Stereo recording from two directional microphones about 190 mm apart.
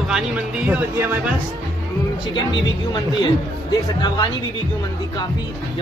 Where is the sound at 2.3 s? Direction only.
25° left (ahead or behind).